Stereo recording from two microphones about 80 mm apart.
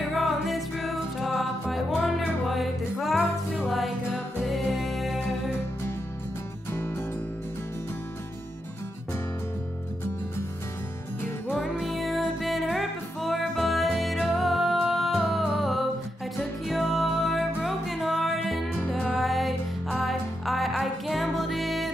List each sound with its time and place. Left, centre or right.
0.0 s music: centre
6.7 s music: left
11.8 s music: centre